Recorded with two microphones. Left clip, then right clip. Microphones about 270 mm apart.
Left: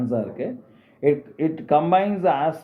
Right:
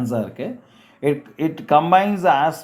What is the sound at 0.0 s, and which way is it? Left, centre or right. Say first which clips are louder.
Speech: right 1 dB; right.